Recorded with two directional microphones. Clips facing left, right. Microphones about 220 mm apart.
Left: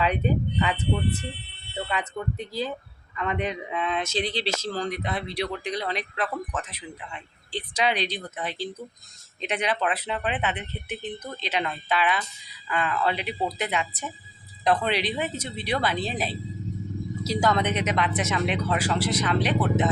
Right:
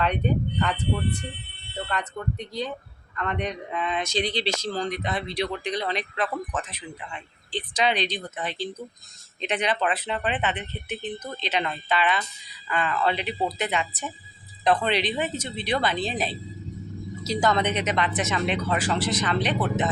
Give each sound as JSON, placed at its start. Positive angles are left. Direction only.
{"t": 0.0, "sound": "a man's voice", "side_deg": 5}